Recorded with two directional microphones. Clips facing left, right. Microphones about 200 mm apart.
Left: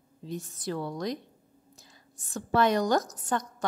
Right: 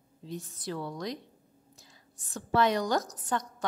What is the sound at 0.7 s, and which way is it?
Speech, 50° left (ahead or behind).